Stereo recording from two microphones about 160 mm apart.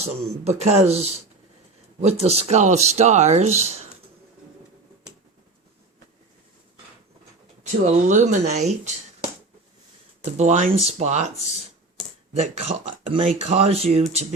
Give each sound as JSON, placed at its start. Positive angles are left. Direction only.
{"t": 0.0, "sound": "speech", "side_deg": -40}
{"t": 7.6, "sound": "speech", "side_deg": -45}
{"t": 10.3, "sound": "speech", "side_deg": -45}
{"t": 12.3, "sound": "speech", "side_deg": -45}